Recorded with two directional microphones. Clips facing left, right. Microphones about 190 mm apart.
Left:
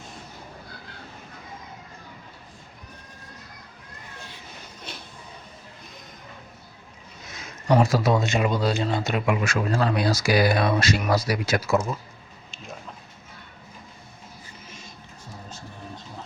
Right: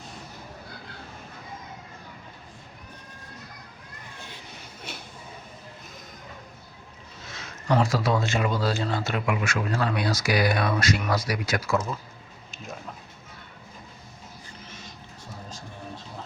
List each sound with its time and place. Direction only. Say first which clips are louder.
7.3 s speech: left 4 dB; 15° left (ahead or behind)